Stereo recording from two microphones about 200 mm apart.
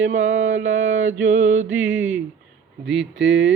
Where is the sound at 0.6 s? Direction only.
75° right (ahead or behind).